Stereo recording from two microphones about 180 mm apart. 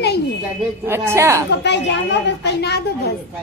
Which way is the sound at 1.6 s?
75° left (ahead or behind).